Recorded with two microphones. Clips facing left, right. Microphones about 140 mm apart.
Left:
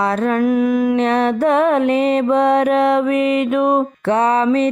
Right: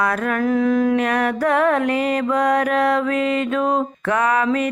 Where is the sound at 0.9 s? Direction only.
25° left (ahead or behind).